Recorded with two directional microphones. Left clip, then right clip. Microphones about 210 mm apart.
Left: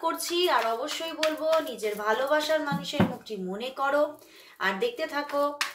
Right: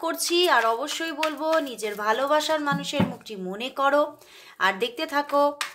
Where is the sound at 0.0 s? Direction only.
45° right (ahead or behind).